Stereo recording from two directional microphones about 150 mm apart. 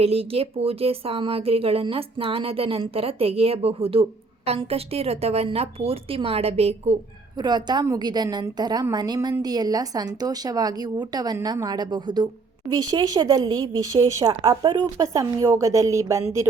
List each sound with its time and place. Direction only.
0.0 s speech: 40° right (ahead or behind)
7.3 s a woman's voice: 30° right (ahead or behind)
15.0 s a woman's voice: 20° right (ahead or behind)